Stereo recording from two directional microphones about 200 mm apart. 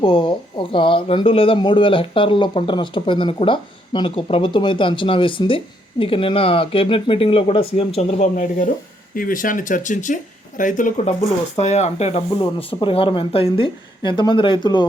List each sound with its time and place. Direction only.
0.0 s speech: 25° left (ahead or behind)